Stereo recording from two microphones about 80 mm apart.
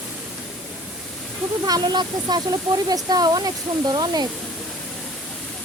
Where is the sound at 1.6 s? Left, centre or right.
Right.